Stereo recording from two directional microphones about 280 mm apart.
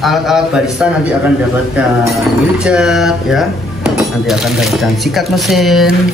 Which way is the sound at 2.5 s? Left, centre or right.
Centre.